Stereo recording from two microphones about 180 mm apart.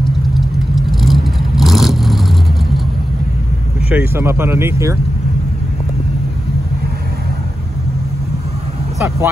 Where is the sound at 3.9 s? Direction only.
10° right (ahead or behind).